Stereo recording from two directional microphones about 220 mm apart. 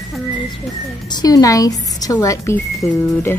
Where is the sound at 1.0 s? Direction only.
20° left (ahead or behind).